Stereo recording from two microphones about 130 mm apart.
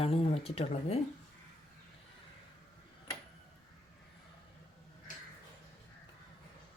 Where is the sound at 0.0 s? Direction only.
50° left (ahead or behind).